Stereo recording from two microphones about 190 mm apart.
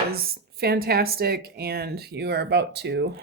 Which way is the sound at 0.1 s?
55° right (ahead or behind).